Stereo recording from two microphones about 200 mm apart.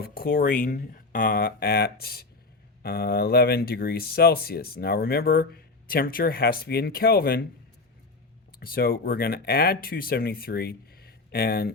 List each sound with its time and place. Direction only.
0.0 s speech: 50° left (ahead or behind)
8.5 s speech: 50° left (ahead or behind)